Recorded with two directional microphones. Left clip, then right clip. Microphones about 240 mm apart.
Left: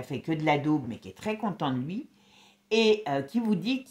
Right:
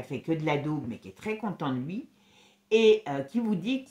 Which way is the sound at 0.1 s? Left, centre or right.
Left.